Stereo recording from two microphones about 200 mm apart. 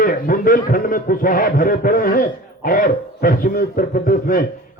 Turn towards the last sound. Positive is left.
turn(degrees=45)  # may be behind; listen again after turning